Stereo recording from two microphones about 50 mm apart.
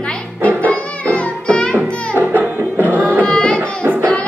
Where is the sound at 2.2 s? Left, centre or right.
Right.